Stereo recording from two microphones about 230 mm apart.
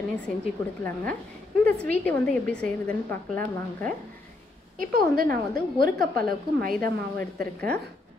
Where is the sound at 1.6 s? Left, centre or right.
Centre.